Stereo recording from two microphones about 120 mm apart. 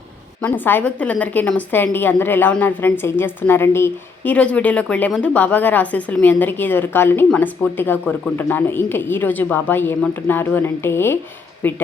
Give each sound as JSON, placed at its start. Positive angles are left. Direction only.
{"t": 0.4, "sound": "a woman's voice", "side_deg": 15}